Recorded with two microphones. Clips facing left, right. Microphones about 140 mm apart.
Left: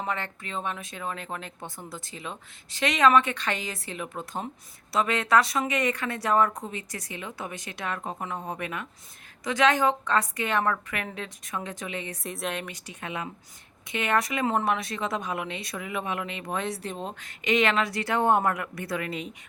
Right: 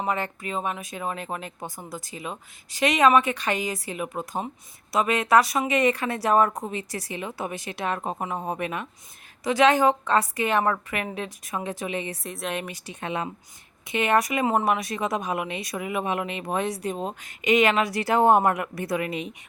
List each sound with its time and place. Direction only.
0.0 s a woman's voice: 15° right (ahead or behind)
12.2 s speech: centre (ahead or behind)
13.0 s speech: 30° right (ahead or behind)
13.9 s speech: 20° right (ahead or behind)
14.4 s speech: 10° right (ahead or behind)